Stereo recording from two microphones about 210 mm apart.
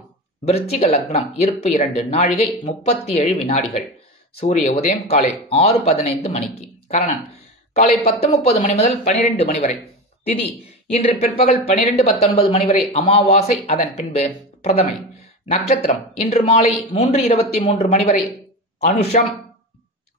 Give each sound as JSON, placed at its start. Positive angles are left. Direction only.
{"t": 0.5, "sound": "speech", "side_deg": 30}
{"t": 10.9, "sound": "speech", "side_deg": 30}